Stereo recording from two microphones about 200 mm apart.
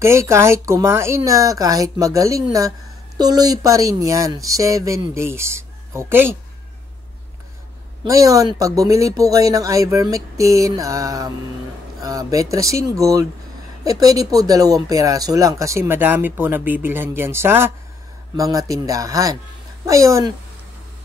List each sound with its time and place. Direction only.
0.0 s speech: 15° right (ahead or behind)
8.0 s speech: 15° right (ahead or behind)